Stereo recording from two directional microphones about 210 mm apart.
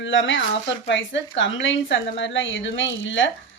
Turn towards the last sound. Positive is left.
turn(degrees=60)  # may be behind; listen again after turning